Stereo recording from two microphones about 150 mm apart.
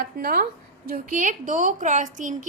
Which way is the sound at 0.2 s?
75° right (ahead or behind).